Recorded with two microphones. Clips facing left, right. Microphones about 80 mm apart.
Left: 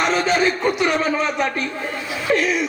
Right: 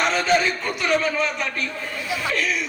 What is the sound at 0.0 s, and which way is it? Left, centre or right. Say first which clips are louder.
Speech: left 2 dB; left.